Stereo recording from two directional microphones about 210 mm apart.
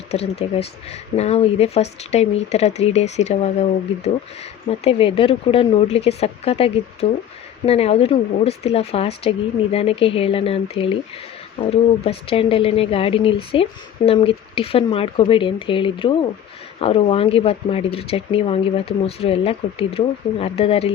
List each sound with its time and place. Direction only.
0.1 s speech: 30° left (ahead or behind)